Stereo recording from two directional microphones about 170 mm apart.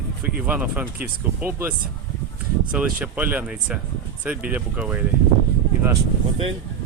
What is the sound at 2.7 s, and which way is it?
Speech, 10° right (ahead or behind).